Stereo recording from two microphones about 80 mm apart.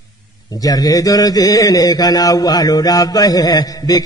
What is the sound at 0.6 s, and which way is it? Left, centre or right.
A man's voice, left.